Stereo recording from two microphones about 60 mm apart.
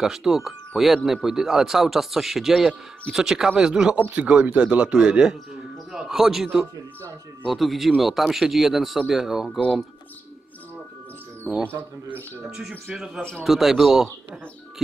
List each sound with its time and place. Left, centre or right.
0.0 s speech: centre
3.9 s a man's voice: right; by 9.6 s centre
11.5 s speech: centre